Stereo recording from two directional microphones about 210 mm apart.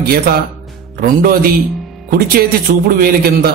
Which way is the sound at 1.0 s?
45° right (ahead or behind).